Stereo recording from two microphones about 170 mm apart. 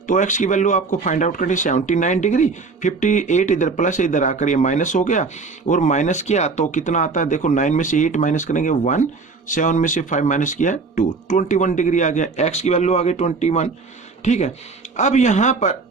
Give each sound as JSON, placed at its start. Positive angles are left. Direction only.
{"t": 0.1, "sound": "speech", "side_deg": 45}